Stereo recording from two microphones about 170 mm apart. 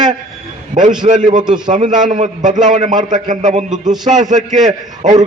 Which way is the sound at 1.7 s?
45° right (ahead or behind).